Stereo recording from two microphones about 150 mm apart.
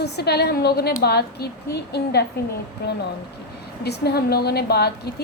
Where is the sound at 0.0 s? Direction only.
90° left.